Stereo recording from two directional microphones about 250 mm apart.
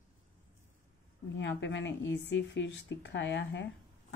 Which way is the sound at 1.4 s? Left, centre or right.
Left.